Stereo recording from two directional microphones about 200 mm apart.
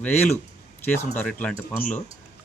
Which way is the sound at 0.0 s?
10° left (ahead or behind).